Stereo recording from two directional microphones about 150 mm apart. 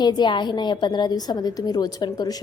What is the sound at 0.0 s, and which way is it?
A woman's voice, 30° left (ahead or behind).